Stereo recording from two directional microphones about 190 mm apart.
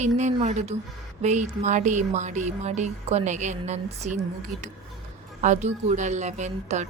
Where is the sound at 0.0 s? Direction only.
40° right (ahead or behind).